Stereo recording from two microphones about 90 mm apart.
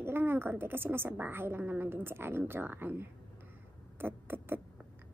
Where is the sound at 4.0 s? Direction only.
25° right (ahead or behind).